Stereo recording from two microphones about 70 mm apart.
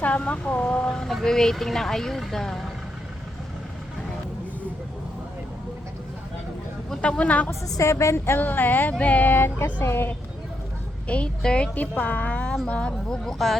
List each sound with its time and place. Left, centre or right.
0.0 s speech: centre
6.9 s speech: centre
7.8 s a woman's voice: left
8.4 s speech: left
11.1 s speech: centre